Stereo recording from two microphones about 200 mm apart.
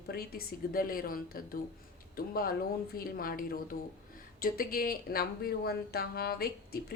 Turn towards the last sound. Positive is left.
turn(degrees=50)  # may be behind; listen again after turning